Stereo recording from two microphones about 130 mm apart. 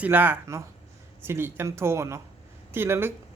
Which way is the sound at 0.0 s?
15° right (ahead or behind).